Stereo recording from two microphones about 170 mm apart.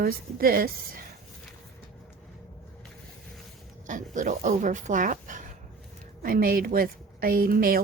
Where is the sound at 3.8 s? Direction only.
50° right (ahead or behind).